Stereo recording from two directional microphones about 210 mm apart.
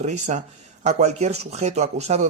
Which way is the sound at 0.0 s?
35° right (ahead or behind).